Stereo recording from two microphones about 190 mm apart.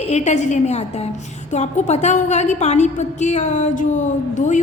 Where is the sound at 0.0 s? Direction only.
35° left (ahead or behind).